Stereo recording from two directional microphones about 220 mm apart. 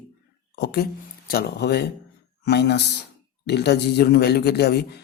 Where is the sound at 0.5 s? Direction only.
45° left (ahead or behind).